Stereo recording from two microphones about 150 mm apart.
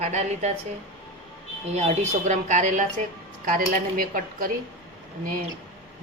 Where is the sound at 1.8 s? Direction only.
50° right (ahead or behind).